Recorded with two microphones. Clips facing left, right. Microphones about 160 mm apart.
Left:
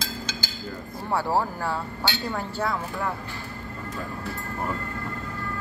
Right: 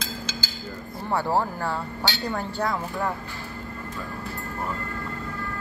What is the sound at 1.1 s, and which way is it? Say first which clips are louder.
Speech: even; 5° left (ahead or behind).